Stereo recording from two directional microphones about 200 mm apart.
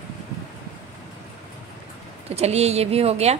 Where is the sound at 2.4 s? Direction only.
30° right (ahead or behind).